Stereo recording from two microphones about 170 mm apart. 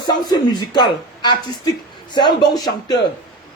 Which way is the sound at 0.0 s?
25° left (ahead or behind).